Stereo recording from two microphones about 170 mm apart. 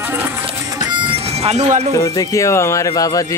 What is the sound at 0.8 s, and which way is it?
Music, 25° right (ahead or behind).